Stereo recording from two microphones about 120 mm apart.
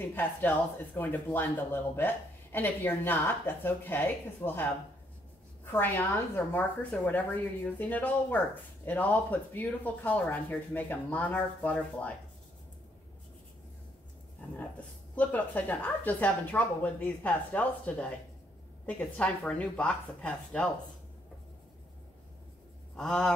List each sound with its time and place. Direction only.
0.1 s speech: 15° left (ahead or behind)
5.7 s speech: 20° left (ahead or behind)
15.1 s speech: 15° left (ahead or behind)
22.9 s a sound: 5° left (ahead or behind)